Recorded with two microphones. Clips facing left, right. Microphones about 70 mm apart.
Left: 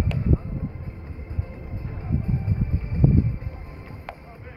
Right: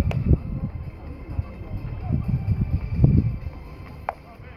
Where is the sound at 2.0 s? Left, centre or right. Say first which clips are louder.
Even; left.